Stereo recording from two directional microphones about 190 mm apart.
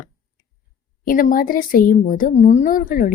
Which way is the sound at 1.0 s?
45° left (ahead or behind).